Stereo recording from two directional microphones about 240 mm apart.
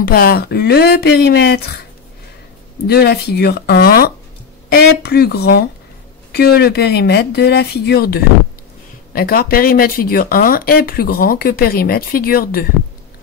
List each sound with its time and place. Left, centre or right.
0.0 s speech: left
2.9 s speech: left